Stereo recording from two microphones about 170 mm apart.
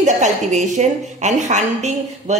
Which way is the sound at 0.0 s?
45° right (ahead or behind).